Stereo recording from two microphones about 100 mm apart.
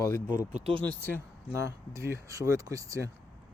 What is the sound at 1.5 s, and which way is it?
Speech, 30° right (ahead or behind).